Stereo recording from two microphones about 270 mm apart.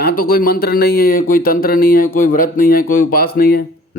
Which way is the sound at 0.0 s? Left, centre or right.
Left.